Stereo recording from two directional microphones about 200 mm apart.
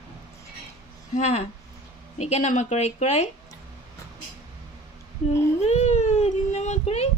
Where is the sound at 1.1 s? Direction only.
35° left (ahead or behind).